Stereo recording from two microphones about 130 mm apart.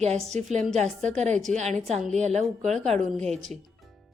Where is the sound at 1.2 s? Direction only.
60° right (ahead or behind).